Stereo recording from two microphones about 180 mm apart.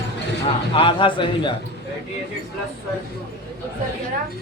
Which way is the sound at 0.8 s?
30° left (ahead or behind).